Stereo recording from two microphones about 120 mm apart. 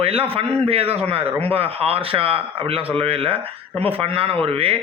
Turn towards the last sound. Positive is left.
turn(degrees=-50)  # may be behind; listen again after turning